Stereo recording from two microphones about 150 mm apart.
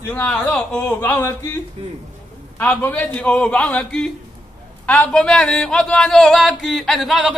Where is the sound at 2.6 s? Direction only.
10° left (ahead or behind).